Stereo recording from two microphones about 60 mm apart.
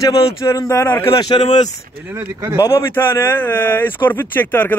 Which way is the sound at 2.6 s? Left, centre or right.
Left.